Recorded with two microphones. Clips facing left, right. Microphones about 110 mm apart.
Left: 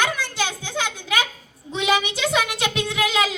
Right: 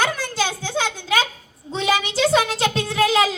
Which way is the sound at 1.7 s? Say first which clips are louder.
Right 1 dB; 45° right (ahead or behind).